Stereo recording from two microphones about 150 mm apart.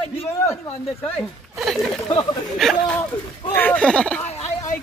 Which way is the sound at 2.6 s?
Centre (ahead or behind).